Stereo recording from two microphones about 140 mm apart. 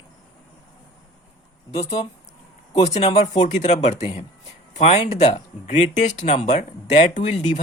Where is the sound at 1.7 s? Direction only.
50° left (ahead or behind).